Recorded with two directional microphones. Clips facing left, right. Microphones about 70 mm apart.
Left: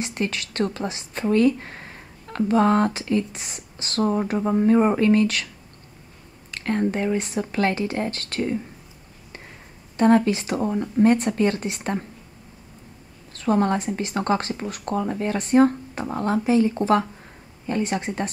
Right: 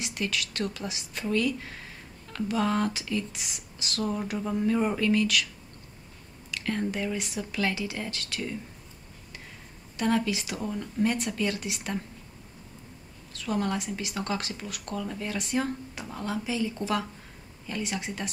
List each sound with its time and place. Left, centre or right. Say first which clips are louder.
0.0 s a woman's voice: left 5 dB; left
6.5 s a woman's voice: left 7 dB; left
9.9 s a woman's voice: left 9 dB; left
13.3 s a woman's voice: left 8 dB; left